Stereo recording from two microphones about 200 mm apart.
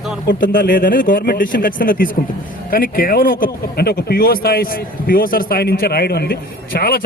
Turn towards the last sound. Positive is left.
turn(degrees=50)  # may be behind; listen again after turning